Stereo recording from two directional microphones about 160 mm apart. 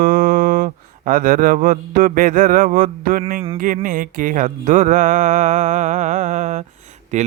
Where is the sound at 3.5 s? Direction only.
60° right (ahead or behind).